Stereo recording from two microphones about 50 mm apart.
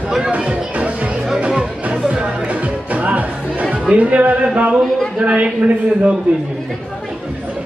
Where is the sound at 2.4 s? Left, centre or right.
Right.